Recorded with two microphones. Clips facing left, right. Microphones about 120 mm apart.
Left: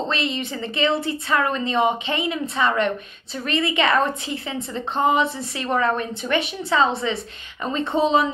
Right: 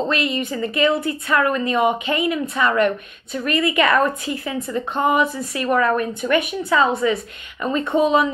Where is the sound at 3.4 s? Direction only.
25° left (ahead or behind).